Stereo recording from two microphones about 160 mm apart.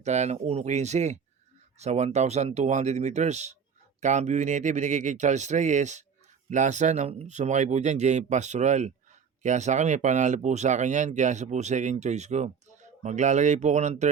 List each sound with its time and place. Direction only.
0.0 s speech: 45° right (ahead or behind)